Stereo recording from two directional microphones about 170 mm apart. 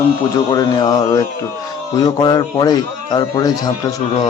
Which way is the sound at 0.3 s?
20° left (ahead or behind).